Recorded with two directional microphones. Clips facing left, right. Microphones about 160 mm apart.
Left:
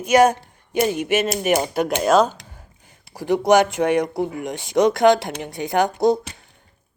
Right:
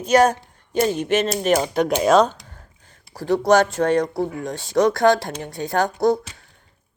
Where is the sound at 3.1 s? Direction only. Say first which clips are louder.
Left 1 dB; 15° left (ahead or behind).